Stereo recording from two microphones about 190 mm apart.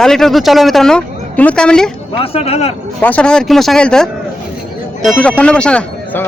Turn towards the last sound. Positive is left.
turn(degrees=5)  # may be behind; listen again after turning